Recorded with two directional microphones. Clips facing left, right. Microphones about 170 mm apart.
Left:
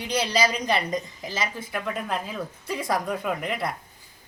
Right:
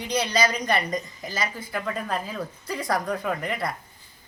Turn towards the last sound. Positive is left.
turn(degrees=0)  # may be behind; listen again after turning